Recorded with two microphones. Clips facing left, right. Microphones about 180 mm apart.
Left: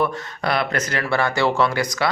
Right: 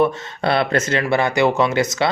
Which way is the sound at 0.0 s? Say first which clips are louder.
Right 5 dB; 25° right (ahead or behind).